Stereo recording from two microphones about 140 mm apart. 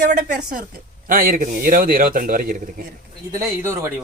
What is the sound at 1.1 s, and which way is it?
A man's voice, 85° right.